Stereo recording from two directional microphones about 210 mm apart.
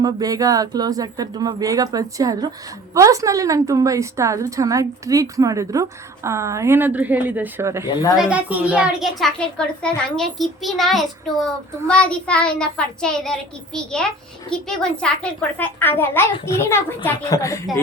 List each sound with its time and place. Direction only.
0.0 s a woman's voice: 15° right (ahead or behind); by 13.3 s 5° left (ahead or behind)
14.5 s a child's voice: 5° left (ahead or behind)